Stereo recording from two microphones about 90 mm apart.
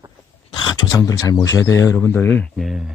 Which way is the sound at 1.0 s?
40° left (ahead or behind).